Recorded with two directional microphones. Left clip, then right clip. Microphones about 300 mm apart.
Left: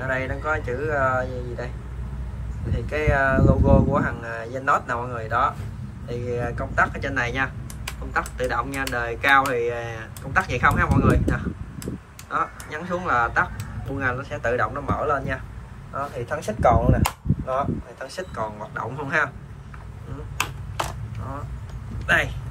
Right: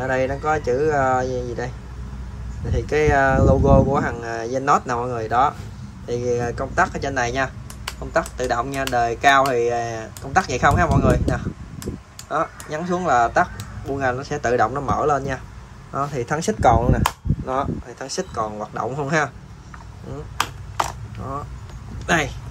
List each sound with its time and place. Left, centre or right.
0.0 s speech: centre
2.7 s speech: right
16.3 s speech: right
22.0 s speech: centre